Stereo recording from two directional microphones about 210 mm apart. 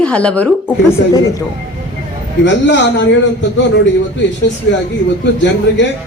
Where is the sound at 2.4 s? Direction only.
55° left (ahead or behind).